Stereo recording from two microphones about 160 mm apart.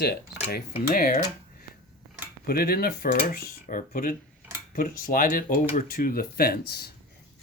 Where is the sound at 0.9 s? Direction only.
55° left (ahead or behind).